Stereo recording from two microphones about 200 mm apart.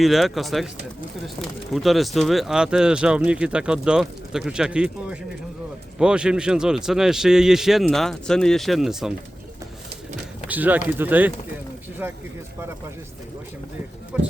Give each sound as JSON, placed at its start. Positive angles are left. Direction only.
{"t": 0.0, "sound": "speech", "side_deg": 0}
{"t": 10.5, "sound": "speech", "side_deg": -10}
{"t": 14.1, "sound": "speech", "side_deg": -5}